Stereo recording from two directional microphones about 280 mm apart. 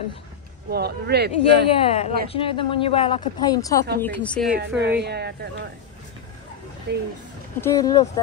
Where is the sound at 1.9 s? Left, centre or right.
Left; by 4.5 s centre.